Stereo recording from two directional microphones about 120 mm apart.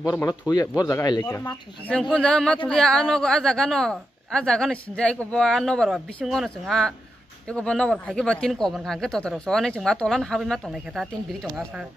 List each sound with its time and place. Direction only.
0.2 s speech: 30° left (ahead or behind)
2.1 s speech: 5° left (ahead or behind)